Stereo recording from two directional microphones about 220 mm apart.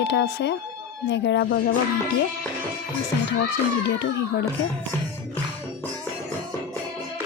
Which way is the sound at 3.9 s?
50° left (ahead or behind).